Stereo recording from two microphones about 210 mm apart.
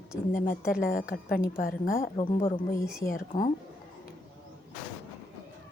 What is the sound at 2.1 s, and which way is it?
Speech, 25° left (ahead or behind).